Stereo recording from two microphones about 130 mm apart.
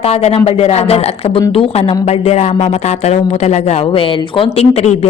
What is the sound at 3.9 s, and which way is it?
A woman's voice, 45° left (ahead or behind).